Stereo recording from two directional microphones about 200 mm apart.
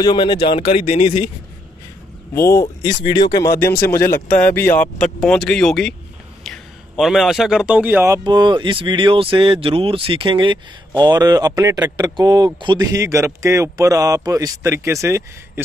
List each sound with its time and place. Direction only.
0.0 s speech: 20° left (ahead or behind)
2.3 s speech: 15° left (ahead or behind)
4.0 s speech: 50° left (ahead or behind)
4.4 s a man's voice: 10° left (ahead or behind); by 15.6 s 15° right (ahead or behind)